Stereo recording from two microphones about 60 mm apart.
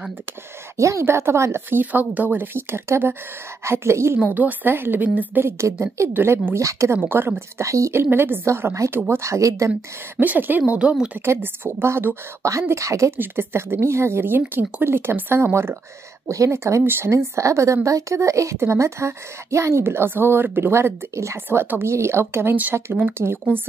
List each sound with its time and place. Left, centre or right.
0.7 s a woman's voice: right
1.7 s a woman's voice: right
4.3 s speech: right
5.4 s a woman's voice: right
7.0 s a woman's voice: right
9.2 s speech: right
10.2 s speech: right
11.2 s speech: right
12.4 s speech: right
13.2 s a woman's voice: right
16.3 s a woman's voice: right
17.1 s a woman's voice: right
21.5 s a woman's voice: right